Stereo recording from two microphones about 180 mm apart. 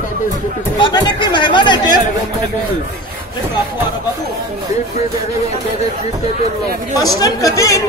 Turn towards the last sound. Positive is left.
turn(degrees=20)  # may be behind; listen again after turning